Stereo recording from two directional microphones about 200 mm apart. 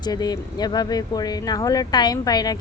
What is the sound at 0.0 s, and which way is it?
Speech, 20° left (ahead or behind).